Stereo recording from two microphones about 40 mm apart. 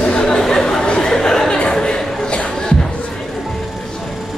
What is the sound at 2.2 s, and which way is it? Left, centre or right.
Music, left.